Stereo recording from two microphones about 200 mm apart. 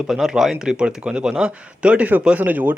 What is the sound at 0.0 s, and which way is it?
Speech, centre (ahead or behind).